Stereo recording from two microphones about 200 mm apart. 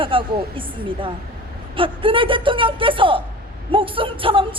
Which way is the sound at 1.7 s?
25° right (ahead or behind).